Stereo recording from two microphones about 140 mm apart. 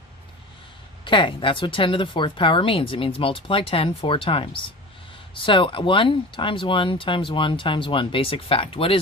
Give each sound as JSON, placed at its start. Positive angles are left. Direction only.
{"t": 1.0, "sound": "speech", "side_deg": 35}